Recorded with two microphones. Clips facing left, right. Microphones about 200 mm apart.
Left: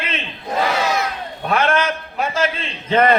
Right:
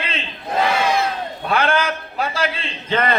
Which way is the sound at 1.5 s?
30° right (ahead or behind).